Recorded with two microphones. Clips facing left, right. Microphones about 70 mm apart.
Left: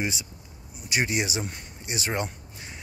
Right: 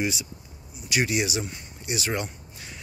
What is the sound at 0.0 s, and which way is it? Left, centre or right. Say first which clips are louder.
Speech: right 2 dB; left.